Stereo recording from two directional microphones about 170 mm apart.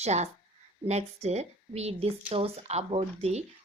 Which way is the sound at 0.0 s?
40° right (ahead or behind).